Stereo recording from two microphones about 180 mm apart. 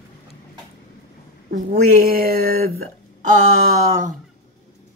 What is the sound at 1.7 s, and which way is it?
Speech, 55° right (ahead or behind).